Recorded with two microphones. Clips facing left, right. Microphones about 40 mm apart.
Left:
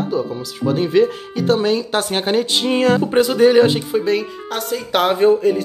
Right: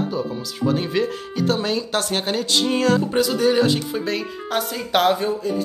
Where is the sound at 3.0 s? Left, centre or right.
Left.